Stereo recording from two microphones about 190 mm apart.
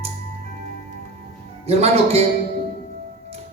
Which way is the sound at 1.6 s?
30° right (ahead or behind).